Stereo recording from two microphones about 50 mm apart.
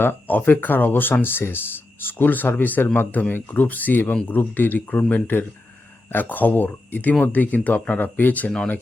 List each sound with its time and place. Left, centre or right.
0.0 s speech: left